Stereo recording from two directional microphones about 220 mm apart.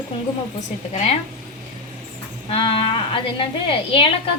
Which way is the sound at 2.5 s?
25° left (ahead or behind).